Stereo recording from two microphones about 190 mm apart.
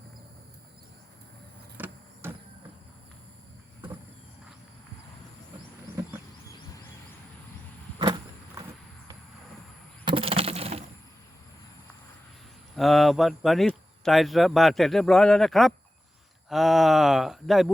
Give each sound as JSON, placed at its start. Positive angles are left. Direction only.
{"t": 1.8, "sound": "vehicle", "side_deg": -10}
{"t": 7.9, "sound": "vehicle", "side_deg": -25}
{"t": 10.1, "sound": "a sound", "side_deg": -30}
{"t": 12.7, "sound": "speech", "side_deg": 0}